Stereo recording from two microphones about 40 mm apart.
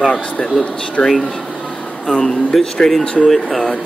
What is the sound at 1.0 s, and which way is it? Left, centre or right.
Speech, left.